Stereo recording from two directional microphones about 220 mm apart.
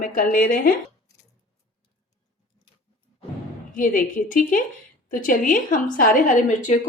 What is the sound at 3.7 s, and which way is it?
A woman's voice, 35° left (ahead or behind).